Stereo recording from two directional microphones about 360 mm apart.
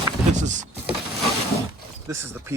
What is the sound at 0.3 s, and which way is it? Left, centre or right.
Wood, centre.